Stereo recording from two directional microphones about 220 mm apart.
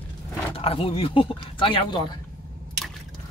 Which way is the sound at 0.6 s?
25° left (ahead or behind).